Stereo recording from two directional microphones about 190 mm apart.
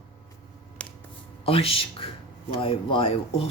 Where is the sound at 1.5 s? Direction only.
30° left (ahead or behind).